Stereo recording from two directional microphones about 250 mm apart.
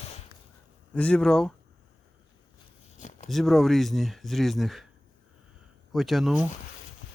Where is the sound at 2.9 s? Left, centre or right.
Left.